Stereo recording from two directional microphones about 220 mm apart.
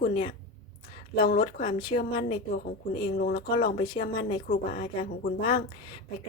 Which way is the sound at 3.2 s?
35° left (ahead or behind).